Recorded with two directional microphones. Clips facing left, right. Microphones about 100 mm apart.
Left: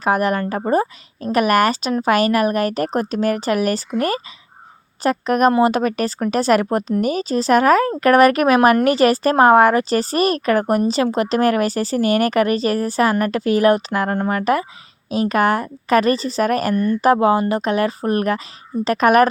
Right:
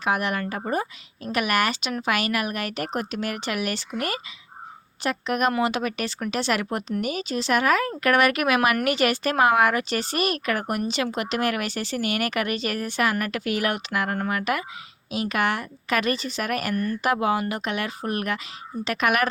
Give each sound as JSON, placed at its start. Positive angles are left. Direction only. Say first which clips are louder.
{"t": 0.0, "sound": "speech", "louder": "left 7 dB", "side_deg": 40}